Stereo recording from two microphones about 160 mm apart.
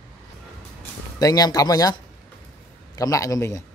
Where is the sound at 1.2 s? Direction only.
25° left (ahead or behind).